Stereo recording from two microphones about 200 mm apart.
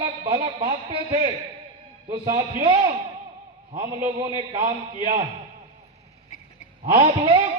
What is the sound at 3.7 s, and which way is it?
Speech, 15° right (ahead or behind).